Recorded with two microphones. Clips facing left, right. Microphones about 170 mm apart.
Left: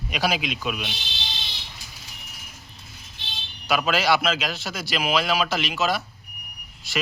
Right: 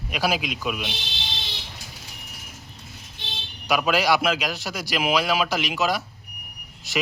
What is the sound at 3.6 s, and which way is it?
A man's voice, 15° right (ahead or behind).